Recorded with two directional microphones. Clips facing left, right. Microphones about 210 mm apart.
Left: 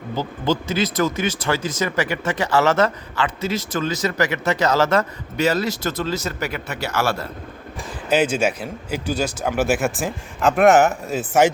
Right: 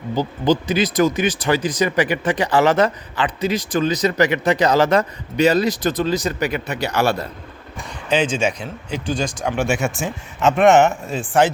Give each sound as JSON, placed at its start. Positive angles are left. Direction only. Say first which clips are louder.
{"t": 0.2, "sound": "speech", "louder": "right 4 dB", "side_deg": -15}
{"t": 7.9, "sound": "speech", "louder": "left 1 dB", "side_deg": 10}